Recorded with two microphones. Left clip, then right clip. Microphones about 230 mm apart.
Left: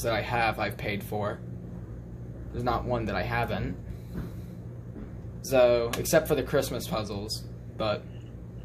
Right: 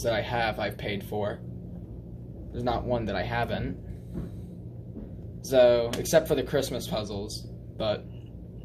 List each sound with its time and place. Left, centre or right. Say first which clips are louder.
0.0 s speech: even; left
2.5 s speech: even; left
5.4 s speech: right 2 dB; left